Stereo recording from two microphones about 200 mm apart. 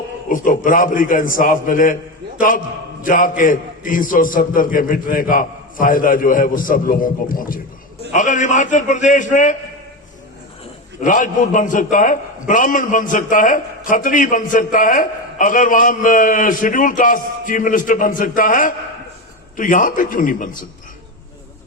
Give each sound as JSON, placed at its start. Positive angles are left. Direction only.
{"t": 0.3, "sound": "a man's voice", "side_deg": 40}
{"t": 3.0, "sound": "a man's voice", "side_deg": 45}
{"t": 11.0, "sound": "a man's voice", "side_deg": 40}